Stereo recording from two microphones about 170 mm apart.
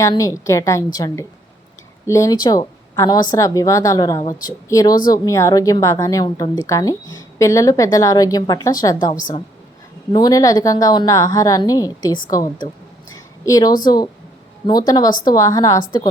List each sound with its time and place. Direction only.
0.0 s a woman's voice: 20° left (ahead or behind)
13.1 s a sound: 20° left (ahead or behind)
13.8 s a woman's voice: 25° left (ahead or behind)